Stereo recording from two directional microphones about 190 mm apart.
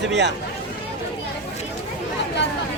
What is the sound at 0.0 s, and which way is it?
Speech, 65° right (ahead or behind).